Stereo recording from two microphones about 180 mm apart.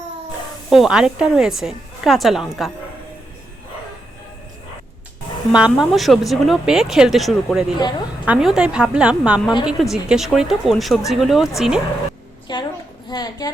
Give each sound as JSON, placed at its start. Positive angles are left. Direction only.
{"t": 0.7, "sound": "speech", "side_deg": -5}
{"t": 5.5, "sound": "speech", "side_deg": -5}
{"t": 12.5, "sound": "a sound", "side_deg": 25}